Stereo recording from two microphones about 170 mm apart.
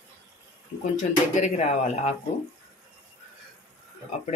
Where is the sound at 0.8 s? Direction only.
45° left (ahead or behind).